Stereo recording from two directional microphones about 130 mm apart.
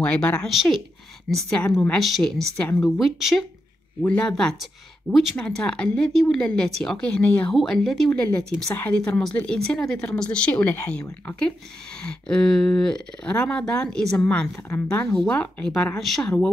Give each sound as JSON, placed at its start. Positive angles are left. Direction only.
{"t": 0.0, "sound": "speech", "side_deg": 10}
{"t": 0.5, "sound": "speech", "side_deg": 0}
{"t": 4.0, "sound": "speech", "side_deg": 10}
{"t": 14.5, "sound": "speech", "side_deg": 20}